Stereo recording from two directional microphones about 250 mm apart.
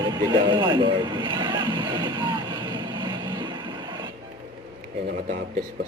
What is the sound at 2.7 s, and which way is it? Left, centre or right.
Vehicle, centre.